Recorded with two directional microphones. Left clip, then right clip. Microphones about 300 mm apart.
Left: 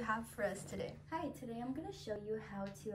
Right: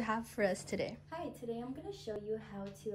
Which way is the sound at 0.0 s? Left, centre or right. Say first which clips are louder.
Right 4 dB; centre.